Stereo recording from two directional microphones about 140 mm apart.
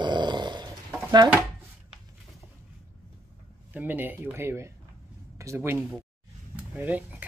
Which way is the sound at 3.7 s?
15° right (ahead or behind).